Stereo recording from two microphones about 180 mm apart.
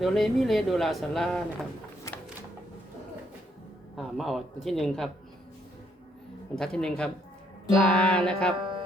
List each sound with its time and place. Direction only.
0.0 s speech: centre (ahead or behind)
3.9 s speech: centre (ahead or behind)
6.6 s speech: 5° left (ahead or behind)
8.5 s music: 25° right (ahead or behind)